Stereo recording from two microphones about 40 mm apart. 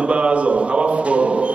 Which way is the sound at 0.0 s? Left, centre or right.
Right.